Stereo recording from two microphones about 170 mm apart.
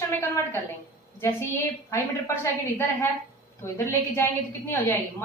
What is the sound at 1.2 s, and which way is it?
A woman's voice, 15° left (ahead or behind).